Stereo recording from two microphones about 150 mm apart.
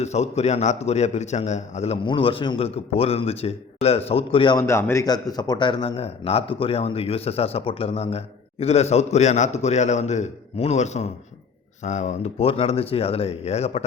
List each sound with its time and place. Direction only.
0.0 s a man's voice: 45° left (ahead or behind)
2.0 s speech: 35° left (ahead or behind)
4.5 s speech: 15° left (ahead or behind); by 13.8 s 45° left (ahead or behind)